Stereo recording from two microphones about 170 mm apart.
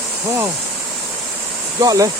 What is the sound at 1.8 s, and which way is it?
Speech, 20° right (ahead or behind).